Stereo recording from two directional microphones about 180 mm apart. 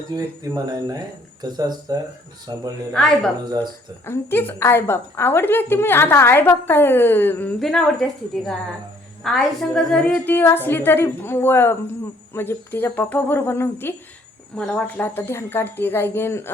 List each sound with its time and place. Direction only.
0.2 s speech: 20° right (ahead or behind)
4.0 s a woman's voice: 10° left (ahead or behind)